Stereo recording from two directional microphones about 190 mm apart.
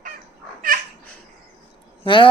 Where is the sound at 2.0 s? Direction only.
25° left (ahead or behind).